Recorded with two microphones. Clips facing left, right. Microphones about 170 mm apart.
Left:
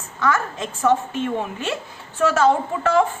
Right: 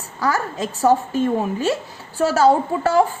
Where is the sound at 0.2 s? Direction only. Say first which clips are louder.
Right 1 dB; 35° right (ahead or behind).